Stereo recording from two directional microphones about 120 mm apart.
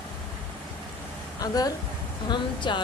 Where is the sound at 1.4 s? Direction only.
30° left (ahead or behind).